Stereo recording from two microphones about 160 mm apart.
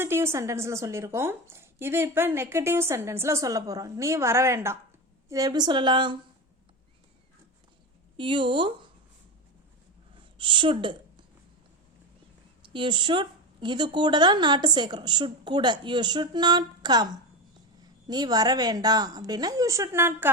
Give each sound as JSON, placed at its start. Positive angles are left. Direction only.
{"t": 0.0, "sound": "a woman's voice", "side_deg": -15}
{"t": 8.1, "sound": "speech", "side_deg": -30}
{"t": 10.3, "sound": "a woman's voice", "side_deg": -30}
{"t": 12.6, "sound": "a woman's voice", "side_deg": -30}
{"t": 18.1, "sound": "a woman's voice", "side_deg": -25}